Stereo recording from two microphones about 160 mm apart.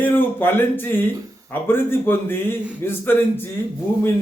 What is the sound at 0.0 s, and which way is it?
Speech, 10° left (ahead or behind).